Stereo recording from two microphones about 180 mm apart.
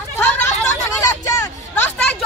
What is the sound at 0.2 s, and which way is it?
Chatter, 15° left (ahead or behind).